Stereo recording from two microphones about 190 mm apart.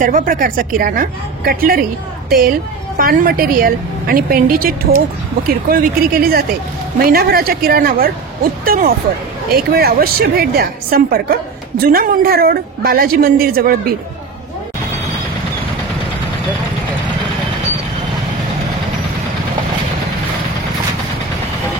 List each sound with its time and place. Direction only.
0.0 s a woman's voice: 45° right (ahead or behind)